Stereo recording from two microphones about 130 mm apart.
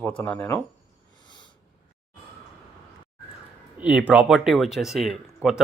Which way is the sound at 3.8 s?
10° right (ahead or behind).